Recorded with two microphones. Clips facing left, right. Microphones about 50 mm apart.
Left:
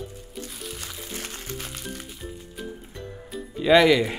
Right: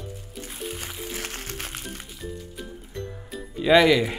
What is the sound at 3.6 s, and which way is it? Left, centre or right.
Speech, centre.